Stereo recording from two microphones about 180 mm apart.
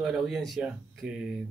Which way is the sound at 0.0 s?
Centre (ahead or behind).